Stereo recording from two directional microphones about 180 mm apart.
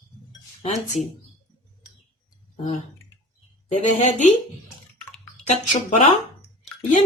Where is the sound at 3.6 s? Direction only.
40° left (ahead or behind).